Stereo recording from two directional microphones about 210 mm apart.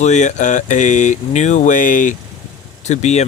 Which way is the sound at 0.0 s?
35° left (ahead or behind).